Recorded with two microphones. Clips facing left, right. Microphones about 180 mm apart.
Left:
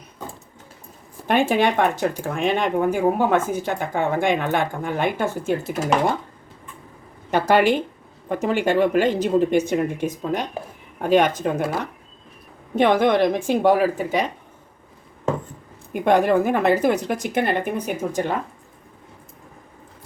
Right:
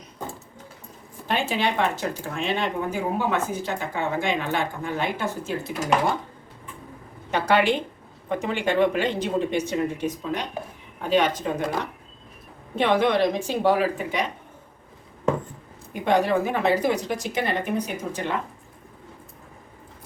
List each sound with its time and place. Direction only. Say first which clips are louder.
1.3 s speech: left 6 dB; 50° left (ahead or behind)
7.3 s speech: left 4 dB; 45° left (ahead or behind)
12.7 s speech: left 4 dB; 50° left (ahead or behind)
15.9 s speech: left 4 dB; 55° left (ahead or behind)